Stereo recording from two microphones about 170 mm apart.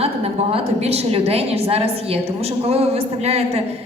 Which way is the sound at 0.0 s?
35° right (ahead or behind).